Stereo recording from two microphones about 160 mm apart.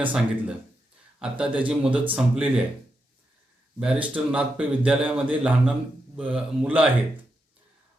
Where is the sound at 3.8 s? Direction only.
5° right (ahead or behind).